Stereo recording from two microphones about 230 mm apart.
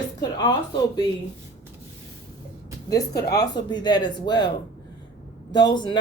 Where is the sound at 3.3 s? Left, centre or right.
Centre.